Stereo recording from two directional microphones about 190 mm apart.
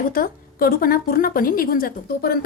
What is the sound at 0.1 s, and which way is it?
A woman's voice, 50° left (ahead or behind).